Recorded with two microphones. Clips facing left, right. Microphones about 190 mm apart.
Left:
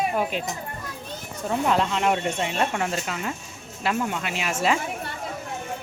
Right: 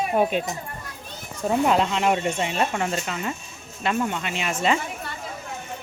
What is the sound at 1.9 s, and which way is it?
Speech, centre (ahead or behind).